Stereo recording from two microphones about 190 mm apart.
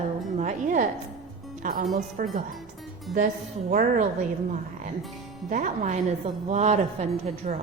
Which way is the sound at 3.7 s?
40° right (ahead or behind).